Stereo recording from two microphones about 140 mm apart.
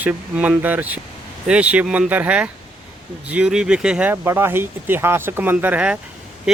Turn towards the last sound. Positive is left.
turn(degrees=-10)  # may be behind; listen again after turning